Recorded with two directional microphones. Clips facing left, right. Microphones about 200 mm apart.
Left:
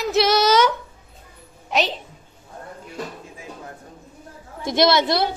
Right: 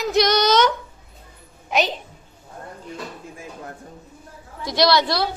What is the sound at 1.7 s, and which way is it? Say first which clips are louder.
Speech: right 1 dB; centre (ahead or behind).